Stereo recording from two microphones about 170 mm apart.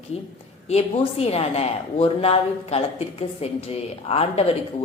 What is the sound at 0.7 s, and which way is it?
Speech, 35° left (ahead or behind).